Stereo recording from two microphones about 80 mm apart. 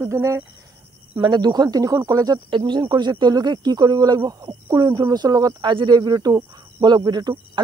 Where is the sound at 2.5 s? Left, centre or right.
Right.